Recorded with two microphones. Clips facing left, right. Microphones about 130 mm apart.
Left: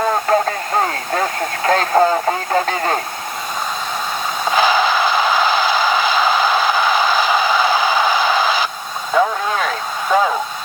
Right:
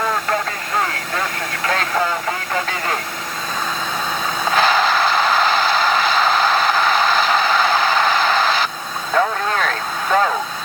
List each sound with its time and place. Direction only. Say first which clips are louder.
0.0 s radio: left 5 dB; 30° left (ahead or behind)
4.5 s mechanisms: left 1 dB; centre (ahead or behind)
9.1 s vehicle: left 2 dB; 5° left (ahead or behind)